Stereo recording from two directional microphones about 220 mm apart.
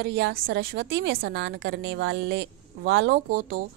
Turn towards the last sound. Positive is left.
turn(degrees=-40)  # may be behind; listen again after turning